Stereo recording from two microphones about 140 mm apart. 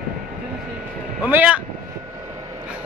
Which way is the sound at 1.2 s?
10° right (ahead or behind).